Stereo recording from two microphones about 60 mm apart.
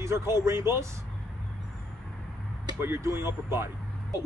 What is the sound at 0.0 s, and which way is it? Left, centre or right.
Speech, right.